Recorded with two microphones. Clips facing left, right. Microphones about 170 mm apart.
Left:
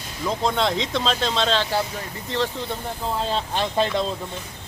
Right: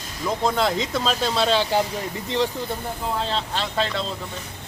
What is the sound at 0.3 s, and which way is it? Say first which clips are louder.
Speech: right 1 dB; 5° right (ahead or behind).